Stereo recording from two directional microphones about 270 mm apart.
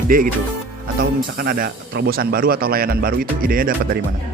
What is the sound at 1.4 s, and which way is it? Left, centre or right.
Speech, right.